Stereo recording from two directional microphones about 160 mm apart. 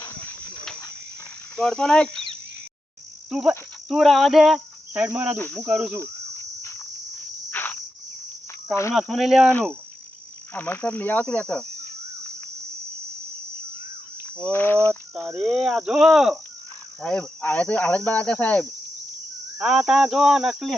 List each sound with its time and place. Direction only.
1.5 s speech: 5° left (ahead or behind)
3.2 s insect: 5° right (ahead or behind)
3.8 s speech: centre (ahead or behind)
5.4 s cricket: 10° left (ahead or behind)
7.5 s insect: 10° left (ahead or behind)
8.7 s cricket: 15° left (ahead or behind)
9.0 s speech: centre (ahead or behind)
9.5 s cricket: 10° left (ahead or behind)
14.5 s cricket: 10° left (ahead or behind)
15.4 s speech: 5° right (ahead or behind)
17.0 s cricket: 5° left (ahead or behind)
19.5 s speech: 5° right (ahead or behind)